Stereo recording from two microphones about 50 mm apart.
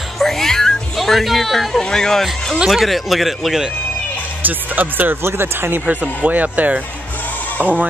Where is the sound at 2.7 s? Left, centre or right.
Centre.